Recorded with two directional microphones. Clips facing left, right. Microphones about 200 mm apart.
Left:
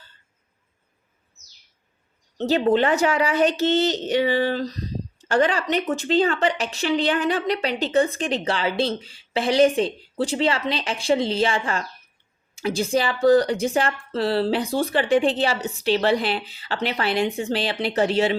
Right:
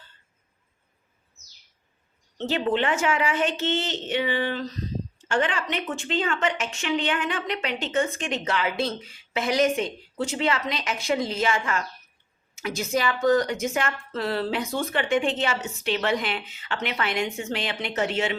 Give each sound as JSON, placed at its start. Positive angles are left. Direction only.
{"t": 2.4, "sound": "a woman's voice", "side_deg": 40}